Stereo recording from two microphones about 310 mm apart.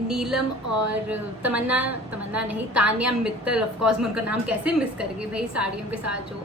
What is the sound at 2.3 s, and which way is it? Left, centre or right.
Speech, right.